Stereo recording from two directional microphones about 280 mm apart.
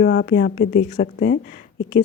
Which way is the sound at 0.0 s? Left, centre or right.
Left.